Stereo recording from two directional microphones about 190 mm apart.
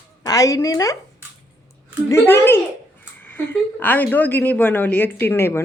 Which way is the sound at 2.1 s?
15° left (ahead or behind).